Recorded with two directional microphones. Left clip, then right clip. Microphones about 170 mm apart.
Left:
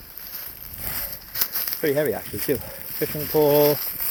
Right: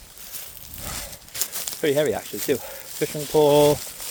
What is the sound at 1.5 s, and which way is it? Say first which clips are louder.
Speech: right 1 dB; 20° right (ahead or behind).